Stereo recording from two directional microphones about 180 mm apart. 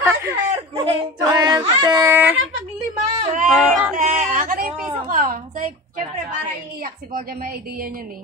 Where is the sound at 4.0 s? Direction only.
45° right (ahead or behind).